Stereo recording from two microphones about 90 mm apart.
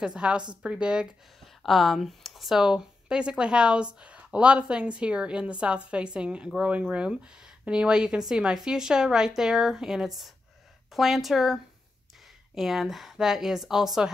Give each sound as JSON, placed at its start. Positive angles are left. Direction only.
{"t": 0.0, "sound": "speech", "side_deg": -10}
{"t": 1.4, "sound": "speech", "side_deg": 0}